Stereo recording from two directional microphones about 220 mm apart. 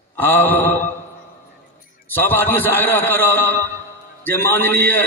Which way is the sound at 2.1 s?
10° left (ahead or behind).